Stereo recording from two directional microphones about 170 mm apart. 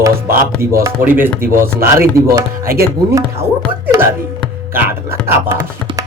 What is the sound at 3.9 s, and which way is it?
Speech, 20° right (ahead or behind).